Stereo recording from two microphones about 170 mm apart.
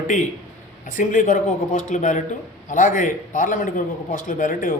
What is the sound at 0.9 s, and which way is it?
A man's voice, 50° left (ahead or behind).